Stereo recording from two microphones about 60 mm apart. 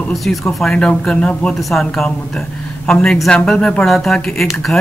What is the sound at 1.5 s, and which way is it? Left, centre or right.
Speech, centre.